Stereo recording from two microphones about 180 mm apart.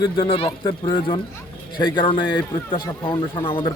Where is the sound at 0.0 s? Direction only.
30° left (ahead or behind).